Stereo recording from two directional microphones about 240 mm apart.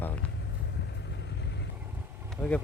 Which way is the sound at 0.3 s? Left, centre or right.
Left.